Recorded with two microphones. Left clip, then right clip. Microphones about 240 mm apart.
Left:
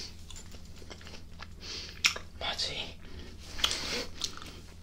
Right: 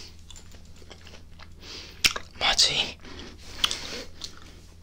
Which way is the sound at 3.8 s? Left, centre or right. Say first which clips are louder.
Left 2 dB; centre.